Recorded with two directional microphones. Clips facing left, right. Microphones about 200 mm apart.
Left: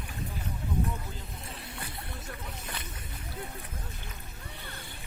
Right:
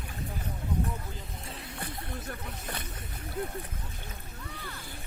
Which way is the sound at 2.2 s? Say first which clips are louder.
Right 2 dB; 55° right (ahead or behind).